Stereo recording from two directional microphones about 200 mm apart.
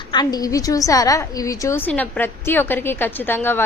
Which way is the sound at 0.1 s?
20° left (ahead or behind).